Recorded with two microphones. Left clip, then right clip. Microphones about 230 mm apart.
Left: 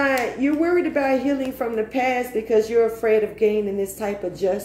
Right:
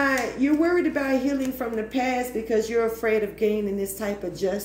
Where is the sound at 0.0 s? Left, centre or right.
Right.